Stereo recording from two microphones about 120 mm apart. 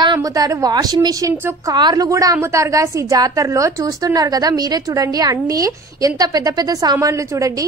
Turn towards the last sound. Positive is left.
turn(degrees=-25)  # may be behind; listen again after turning